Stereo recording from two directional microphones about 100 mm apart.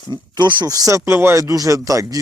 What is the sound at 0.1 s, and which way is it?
Speech, 45° right (ahead or behind).